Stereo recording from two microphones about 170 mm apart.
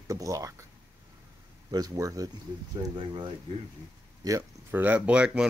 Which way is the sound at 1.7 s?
20° right (ahead or behind).